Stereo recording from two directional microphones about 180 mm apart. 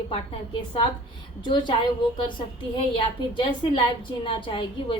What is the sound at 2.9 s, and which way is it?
A woman's voice, 30° left (ahead or behind).